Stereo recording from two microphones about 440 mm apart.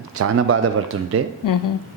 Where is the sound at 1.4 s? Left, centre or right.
Left.